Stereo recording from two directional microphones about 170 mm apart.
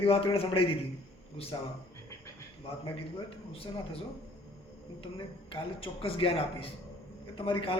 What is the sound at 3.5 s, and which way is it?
Speech, 35° left (ahead or behind).